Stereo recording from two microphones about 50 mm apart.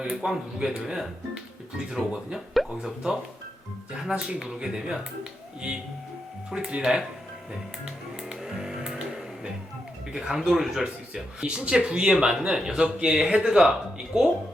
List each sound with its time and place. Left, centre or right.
0.0 s speech: centre
2.8 s speech: centre
6.7 s speech: centre
8.3 s music: centre
10.1 s speech: centre